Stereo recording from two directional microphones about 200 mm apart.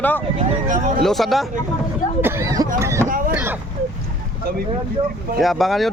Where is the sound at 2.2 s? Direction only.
15° right (ahead or behind).